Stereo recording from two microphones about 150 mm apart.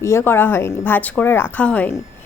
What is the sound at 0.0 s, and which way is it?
Speech, 20° left (ahead or behind).